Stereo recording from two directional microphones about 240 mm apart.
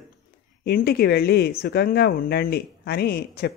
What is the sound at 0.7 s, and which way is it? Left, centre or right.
Speech, left.